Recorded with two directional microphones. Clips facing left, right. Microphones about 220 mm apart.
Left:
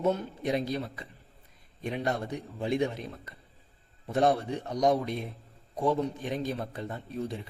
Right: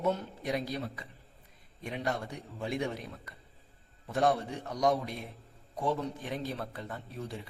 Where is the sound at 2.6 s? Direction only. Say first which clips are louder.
Left 6 dB; 25° left (ahead or behind).